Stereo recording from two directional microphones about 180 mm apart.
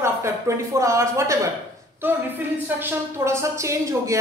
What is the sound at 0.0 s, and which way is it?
A woman's voice, 15° right (ahead or behind).